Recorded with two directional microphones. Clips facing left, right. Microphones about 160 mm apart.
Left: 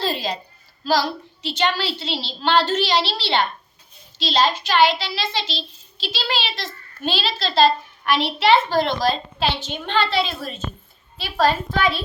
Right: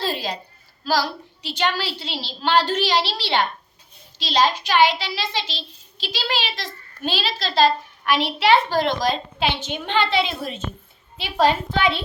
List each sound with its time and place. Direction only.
0.0 s a woman's voice: 5° right (ahead or behind)